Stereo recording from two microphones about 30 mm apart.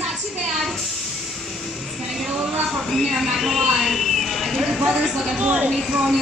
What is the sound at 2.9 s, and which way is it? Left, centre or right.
Speech, centre.